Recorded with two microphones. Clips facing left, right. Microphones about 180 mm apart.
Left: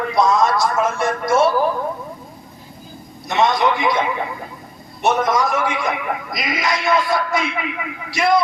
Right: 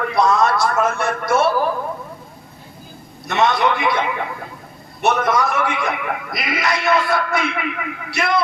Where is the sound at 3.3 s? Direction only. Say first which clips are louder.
Even; 60° right (ahead or behind).